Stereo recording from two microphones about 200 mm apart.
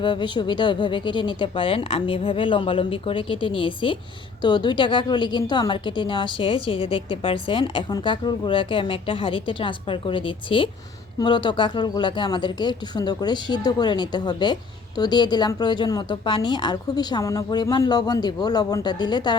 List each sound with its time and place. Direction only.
0.0 s a woman's voice: 25° left (ahead or behind)